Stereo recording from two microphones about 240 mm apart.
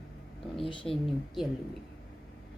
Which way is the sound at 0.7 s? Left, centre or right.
Left.